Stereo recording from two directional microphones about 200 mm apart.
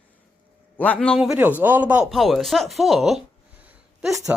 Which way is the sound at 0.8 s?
5° left (ahead or behind).